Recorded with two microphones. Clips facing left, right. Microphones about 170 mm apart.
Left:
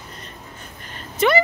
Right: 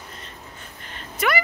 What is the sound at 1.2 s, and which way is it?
Speech, 25° left (ahead or behind).